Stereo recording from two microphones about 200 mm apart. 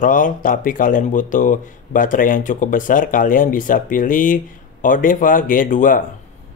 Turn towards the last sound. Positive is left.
turn(degrees=40)  # may be behind; listen again after turning